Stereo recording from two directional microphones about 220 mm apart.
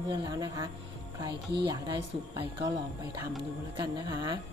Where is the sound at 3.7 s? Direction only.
20° right (ahead or behind).